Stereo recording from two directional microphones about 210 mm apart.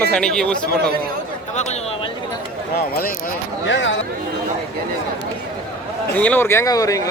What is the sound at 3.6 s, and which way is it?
Speech, 60° left (ahead or behind).